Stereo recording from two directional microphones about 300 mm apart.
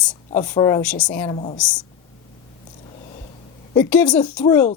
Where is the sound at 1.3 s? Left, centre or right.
Centre.